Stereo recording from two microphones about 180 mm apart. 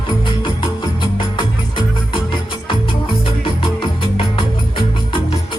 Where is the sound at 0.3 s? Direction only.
30° left (ahead or behind).